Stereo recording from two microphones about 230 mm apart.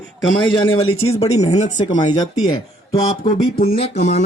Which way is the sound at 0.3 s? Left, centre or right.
Left.